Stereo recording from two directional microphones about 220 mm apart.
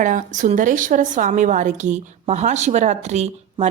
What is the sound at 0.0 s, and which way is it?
A woman's voice, 35° right (ahead or behind).